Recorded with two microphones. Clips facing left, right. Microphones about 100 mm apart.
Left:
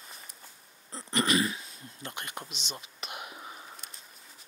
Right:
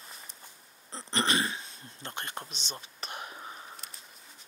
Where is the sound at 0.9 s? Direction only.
30° right (ahead or behind).